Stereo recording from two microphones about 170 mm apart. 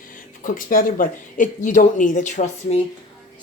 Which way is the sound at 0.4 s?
55° left (ahead or behind).